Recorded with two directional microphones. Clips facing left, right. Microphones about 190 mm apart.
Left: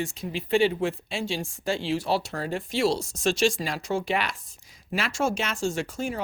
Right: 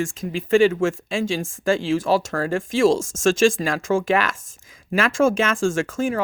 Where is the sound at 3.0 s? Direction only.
45° right (ahead or behind).